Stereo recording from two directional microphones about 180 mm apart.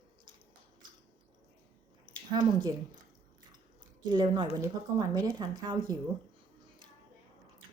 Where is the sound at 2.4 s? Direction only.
25° right (ahead or behind).